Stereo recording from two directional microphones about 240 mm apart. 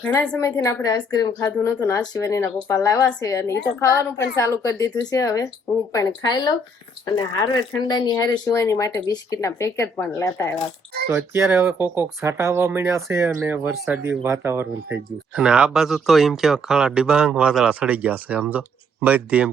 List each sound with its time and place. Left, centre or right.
0.0 s a woman's voice: centre
7.9 s a woman's voice: centre
11.1 s speech: centre